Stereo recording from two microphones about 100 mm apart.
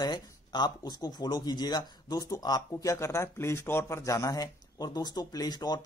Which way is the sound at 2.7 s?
30° left (ahead or behind).